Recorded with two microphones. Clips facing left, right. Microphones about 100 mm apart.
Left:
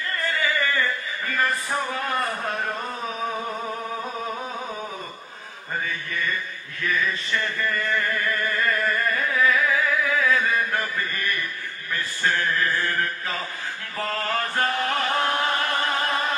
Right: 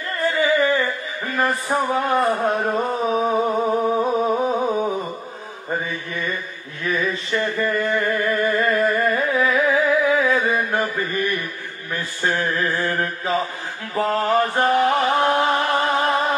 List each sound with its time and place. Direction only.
0.2 s music: 20° right (ahead or behind)
5.7 s mantra: 20° right (ahead or behind)
6.8 s a sound: 20° right (ahead or behind)
11.9 s mantra: 20° right (ahead or behind)